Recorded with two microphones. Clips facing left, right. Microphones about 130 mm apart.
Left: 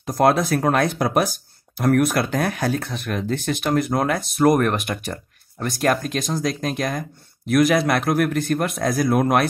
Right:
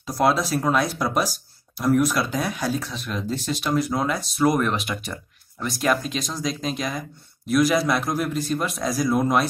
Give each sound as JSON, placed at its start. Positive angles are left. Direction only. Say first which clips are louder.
{"t": 0.0, "sound": "speech", "louder": "left 3 dB", "side_deg": 55}